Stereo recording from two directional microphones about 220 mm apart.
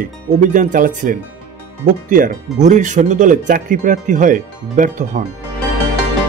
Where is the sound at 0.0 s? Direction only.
35° right (ahead or behind).